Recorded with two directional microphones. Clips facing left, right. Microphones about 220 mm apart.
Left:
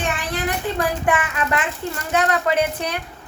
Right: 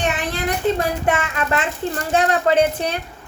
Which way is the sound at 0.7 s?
25° right (ahead or behind).